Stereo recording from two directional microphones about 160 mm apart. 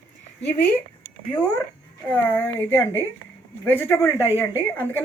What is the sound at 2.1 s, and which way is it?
Speech, 10° left (ahead or behind).